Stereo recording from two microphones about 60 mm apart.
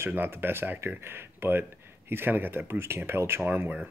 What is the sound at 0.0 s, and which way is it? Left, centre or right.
Speech, right.